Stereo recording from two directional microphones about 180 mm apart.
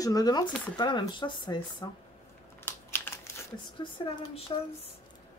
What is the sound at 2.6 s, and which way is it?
Typing, 10° left (ahead or behind).